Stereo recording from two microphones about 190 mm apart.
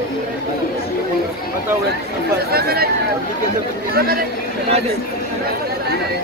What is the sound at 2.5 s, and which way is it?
Speech, 55° right (ahead or behind).